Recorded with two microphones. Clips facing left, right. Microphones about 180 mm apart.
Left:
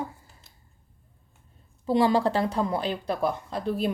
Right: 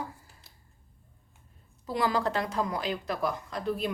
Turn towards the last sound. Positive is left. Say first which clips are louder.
# left 4 dB
turn(degrees=30)  # may be behind; listen again after turning